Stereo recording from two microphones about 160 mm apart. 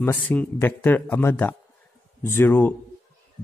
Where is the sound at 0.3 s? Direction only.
10° left (ahead or behind).